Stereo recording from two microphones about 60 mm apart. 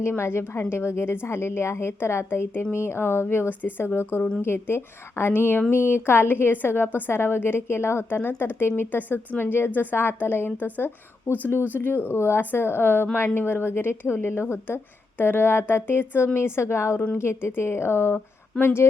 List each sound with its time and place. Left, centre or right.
0.2 s a woman's voice: left
3.6 s a woman's voice: left